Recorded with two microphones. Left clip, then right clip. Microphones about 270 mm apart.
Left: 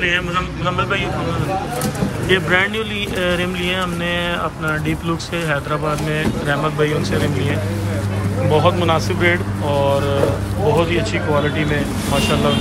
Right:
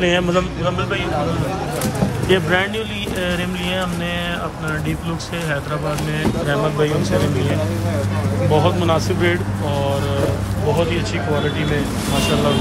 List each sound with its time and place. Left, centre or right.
0.0 s speech: centre
2.2 s speech: centre
6.5 s speech: centre
8.5 s speech: centre